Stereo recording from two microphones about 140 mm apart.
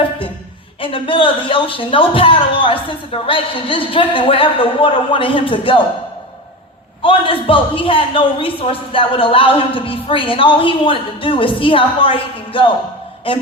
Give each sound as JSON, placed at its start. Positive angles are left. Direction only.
{"t": 0.8, "sound": "a woman's voice", "side_deg": 40}
{"t": 7.0, "sound": "a woman's voice", "side_deg": 40}